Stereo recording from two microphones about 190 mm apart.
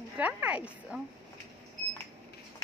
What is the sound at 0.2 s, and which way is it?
Speech, 5° right (ahead or behind).